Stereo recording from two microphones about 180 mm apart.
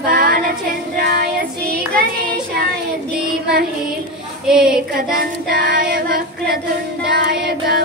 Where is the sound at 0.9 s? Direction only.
60° right (ahead or behind).